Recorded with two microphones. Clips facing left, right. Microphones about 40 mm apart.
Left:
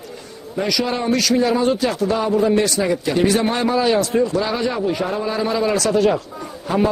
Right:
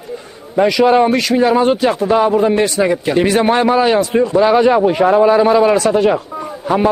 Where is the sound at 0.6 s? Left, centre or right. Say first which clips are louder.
Right 10 dB; right.